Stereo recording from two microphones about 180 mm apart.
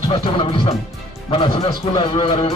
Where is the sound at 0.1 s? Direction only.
30° left (ahead or behind).